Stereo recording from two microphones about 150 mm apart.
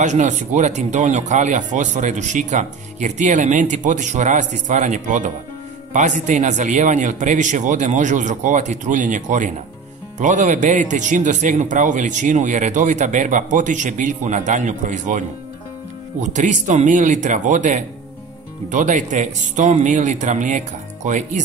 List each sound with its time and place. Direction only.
0.0 s speech: 50° right (ahead or behind)